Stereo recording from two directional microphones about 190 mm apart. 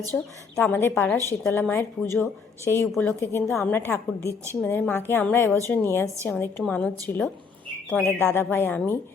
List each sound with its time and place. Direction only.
0.5 s a woman's voice: 10° left (ahead or behind)
7.9 s a woman's voice: 15° left (ahead or behind)